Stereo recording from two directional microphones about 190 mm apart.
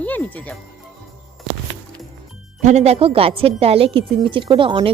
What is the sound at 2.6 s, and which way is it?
A woman's voice, 35° right (ahead or behind).